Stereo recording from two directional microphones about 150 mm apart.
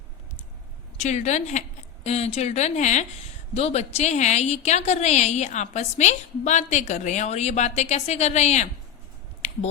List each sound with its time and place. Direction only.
1.0 s a woman's voice: 50° left (ahead or behind)